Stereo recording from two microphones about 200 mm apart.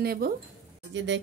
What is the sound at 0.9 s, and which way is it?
Speech, 65° right (ahead or behind).